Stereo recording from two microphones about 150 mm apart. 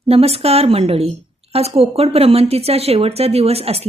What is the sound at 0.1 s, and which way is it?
A woman's voice, 40° right (ahead or behind).